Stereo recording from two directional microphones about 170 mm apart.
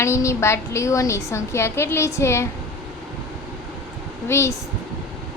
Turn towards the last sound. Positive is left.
turn(degrees=15)  # may be behind; listen again after turning